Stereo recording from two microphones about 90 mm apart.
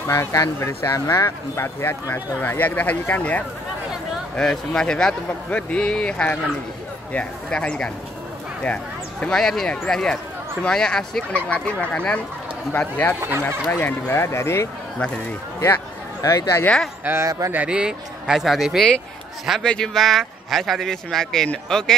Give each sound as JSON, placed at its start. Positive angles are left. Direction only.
{"t": 0.1, "sound": "speech", "side_deg": 35}
{"t": 9.2, "sound": "speech", "side_deg": 5}
{"t": 16.2, "sound": "speech", "side_deg": 40}
{"t": 17.0, "sound": "speech", "side_deg": -25}
{"t": 17.5, "sound": "a man's voice", "side_deg": -15}